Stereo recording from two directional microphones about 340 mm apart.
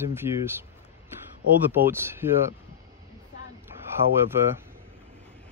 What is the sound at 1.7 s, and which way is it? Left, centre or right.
Speech, centre.